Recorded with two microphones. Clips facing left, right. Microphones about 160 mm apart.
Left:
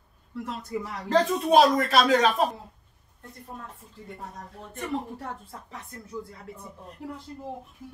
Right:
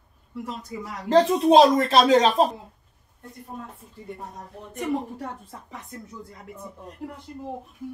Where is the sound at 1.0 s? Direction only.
25° right (ahead or behind).